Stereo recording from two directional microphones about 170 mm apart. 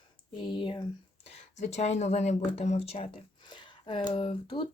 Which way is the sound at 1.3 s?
40° left (ahead or behind).